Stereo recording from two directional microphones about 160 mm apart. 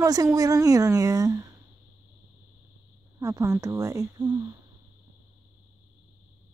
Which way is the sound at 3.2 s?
20° right (ahead or behind).